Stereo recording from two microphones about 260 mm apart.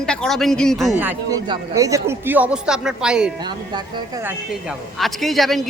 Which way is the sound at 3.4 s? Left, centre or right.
Centre.